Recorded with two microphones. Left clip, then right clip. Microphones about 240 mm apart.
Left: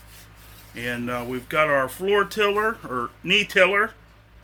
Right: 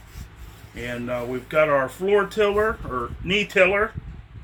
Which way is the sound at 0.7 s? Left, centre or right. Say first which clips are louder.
Even; left.